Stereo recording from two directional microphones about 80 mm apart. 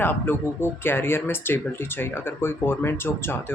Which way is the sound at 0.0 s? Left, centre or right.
Left.